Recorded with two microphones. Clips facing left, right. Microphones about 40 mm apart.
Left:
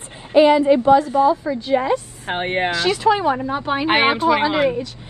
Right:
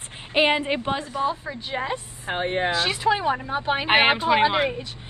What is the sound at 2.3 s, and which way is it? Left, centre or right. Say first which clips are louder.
Speech: left 3 dB; left.